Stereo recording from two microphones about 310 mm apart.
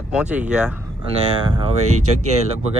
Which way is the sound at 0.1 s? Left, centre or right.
Centre.